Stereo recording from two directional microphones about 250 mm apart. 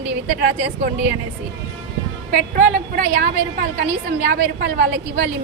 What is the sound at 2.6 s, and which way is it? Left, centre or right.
Speech, right.